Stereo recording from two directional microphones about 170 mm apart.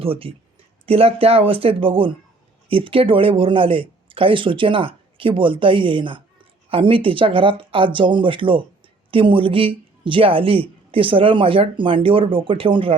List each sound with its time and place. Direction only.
0.0 s speech: 35° right (ahead or behind)